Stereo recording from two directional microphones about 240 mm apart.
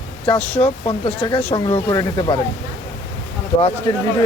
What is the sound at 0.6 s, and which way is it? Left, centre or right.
Speech, left.